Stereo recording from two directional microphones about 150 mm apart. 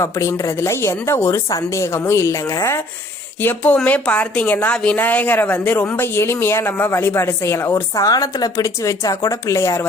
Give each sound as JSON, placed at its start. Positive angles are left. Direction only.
{"t": 0.0, "sound": "a woman's voice", "side_deg": 20}